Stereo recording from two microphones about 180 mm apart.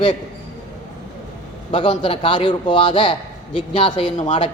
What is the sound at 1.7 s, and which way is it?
A man's voice, 25° left (ahead or behind).